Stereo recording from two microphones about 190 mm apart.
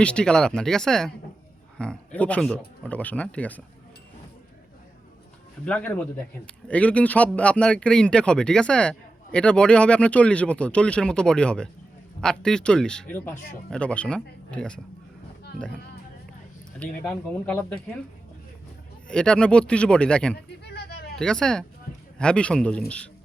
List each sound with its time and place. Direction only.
0.0 s speech: 5° left (ahead or behind)
5.6 s speech: 10° left (ahead or behind)
16.8 s speech: 5° left (ahead or behind)
19.0 s speech: 5° left (ahead or behind)
20.3 s a sound: 60° left (ahead or behind)
21.2 s speech: 5° left (ahead or behind)